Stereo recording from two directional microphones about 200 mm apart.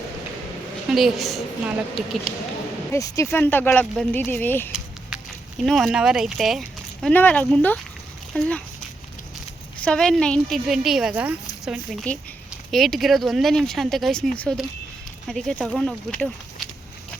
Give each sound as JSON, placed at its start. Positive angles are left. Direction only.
{"t": 0.9, "sound": "speech", "side_deg": 0}
{"t": 2.9, "sound": "speech", "side_deg": 15}
{"t": 5.6, "sound": "a child's voice", "side_deg": 0}
{"t": 9.8, "sound": "speech", "side_deg": 5}
{"t": 12.1, "sound": "speech", "side_deg": 10}